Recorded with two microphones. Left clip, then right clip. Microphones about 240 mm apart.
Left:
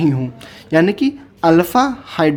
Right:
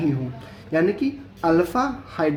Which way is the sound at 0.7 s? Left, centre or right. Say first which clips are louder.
Left 7 dB; left.